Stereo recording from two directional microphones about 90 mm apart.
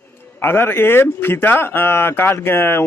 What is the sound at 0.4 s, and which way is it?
A man's voice, 25° left (ahead or behind).